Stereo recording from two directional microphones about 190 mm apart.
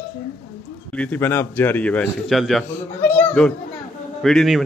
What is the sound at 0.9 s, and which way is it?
A man's voice, 5° left (ahead or behind).